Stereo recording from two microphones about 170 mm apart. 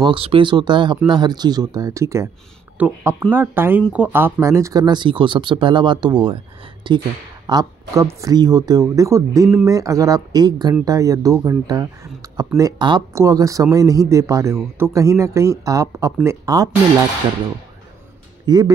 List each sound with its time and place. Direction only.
0.0 s speech: 30° right (ahead or behind)
18.4 s speech: 25° right (ahead or behind)